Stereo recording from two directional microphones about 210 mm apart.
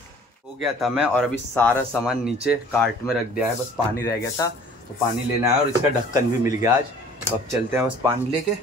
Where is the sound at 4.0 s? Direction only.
15° left (ahead or behind).